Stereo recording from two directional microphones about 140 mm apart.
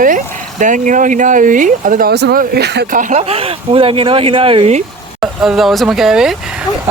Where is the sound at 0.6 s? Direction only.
65° right (ahead or behind); by 2.5 s 90° right.